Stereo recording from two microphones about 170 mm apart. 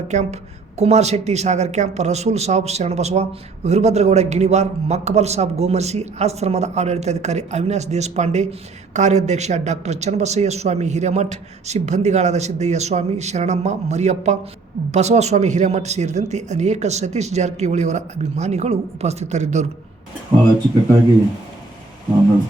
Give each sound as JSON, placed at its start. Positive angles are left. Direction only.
{"t": 0.1, "sound": "a woman's voice", "side_deg": -45}